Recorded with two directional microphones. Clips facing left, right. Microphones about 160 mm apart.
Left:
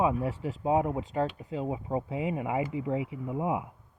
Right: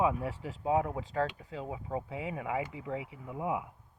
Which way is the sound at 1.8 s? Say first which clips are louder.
Left 5 dB; 30° left (ahead or behind).